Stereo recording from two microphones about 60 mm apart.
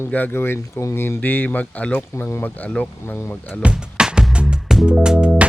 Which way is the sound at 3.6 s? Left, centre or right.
Centre.